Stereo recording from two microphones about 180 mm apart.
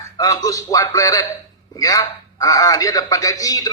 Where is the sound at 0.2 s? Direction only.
20° left (ahead or behind).